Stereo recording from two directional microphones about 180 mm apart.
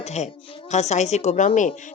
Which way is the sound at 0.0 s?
40° left (ahead or behind).